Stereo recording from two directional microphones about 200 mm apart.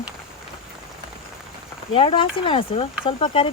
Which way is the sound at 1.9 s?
25° left (ahead or behind).